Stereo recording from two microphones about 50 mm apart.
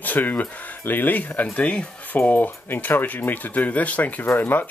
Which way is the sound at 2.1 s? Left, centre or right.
Left.